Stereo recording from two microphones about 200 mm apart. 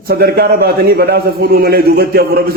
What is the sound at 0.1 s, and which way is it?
A man's voice, 50° right (ahead or behind).